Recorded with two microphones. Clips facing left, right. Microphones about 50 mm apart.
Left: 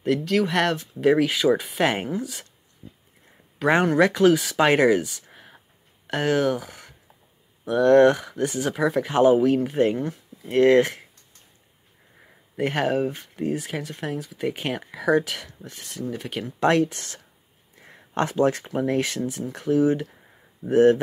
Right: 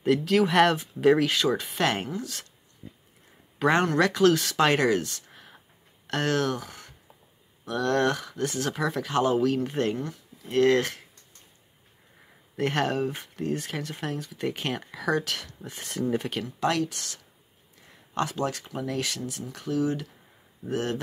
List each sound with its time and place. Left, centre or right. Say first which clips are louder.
0.0 s speech: even; centre
3.7 s speech: left 6 dB; centre
7.6 s speech: left 9 dB; left
12.5 s speech: left 3 dB; centre
16.4 s speech: left 10 dB; left
18.4 s speech: left 8 dB; left